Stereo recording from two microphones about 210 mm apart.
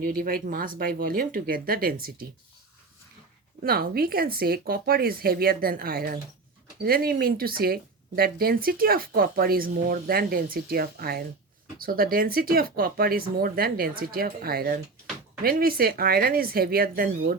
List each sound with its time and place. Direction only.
0.0 s speech: 45° right (ahead or behind)
3.6 s speech: 45° right (ahead or behind)